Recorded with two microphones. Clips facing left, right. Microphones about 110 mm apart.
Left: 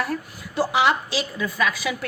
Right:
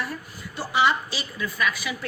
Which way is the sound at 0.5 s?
75° left (ahead or behind).